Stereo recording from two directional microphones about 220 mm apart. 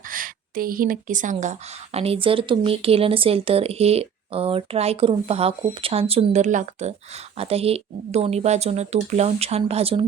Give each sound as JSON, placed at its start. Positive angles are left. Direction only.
{"t": 0.1, "sound": "speech", "side_deg": -40}